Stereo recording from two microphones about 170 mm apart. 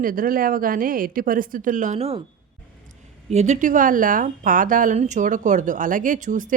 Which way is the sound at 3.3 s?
40° right (ahead or behind).